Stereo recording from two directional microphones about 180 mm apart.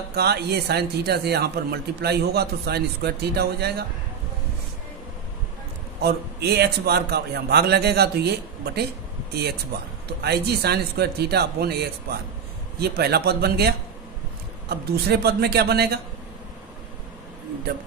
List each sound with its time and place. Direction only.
0.1 s a man's voice: 65° right (ahead or behind)
5.9 s a man's voice: 65° right (ahead or behind)
9.3 s a man's voice: 65° right (ahead or behind)
12.8 s a man's voice: 65° right (ahead or behind)